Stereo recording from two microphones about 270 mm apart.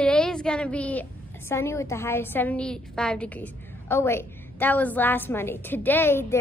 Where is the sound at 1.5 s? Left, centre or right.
Centre.